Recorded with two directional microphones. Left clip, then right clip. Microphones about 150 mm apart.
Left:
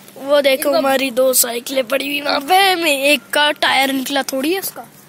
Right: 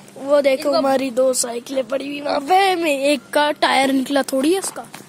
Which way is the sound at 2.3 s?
20° right (ahead or behind).